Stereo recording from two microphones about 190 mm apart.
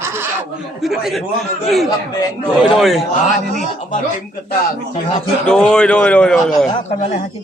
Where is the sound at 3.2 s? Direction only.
45° left (ahead or behind).